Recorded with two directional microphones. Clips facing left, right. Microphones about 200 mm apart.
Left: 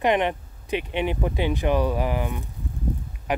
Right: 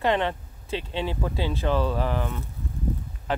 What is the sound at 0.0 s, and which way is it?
Speech, 15° left (ahead or behind).